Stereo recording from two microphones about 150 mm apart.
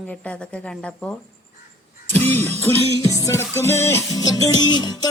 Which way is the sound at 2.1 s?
15° left (ahead or behind).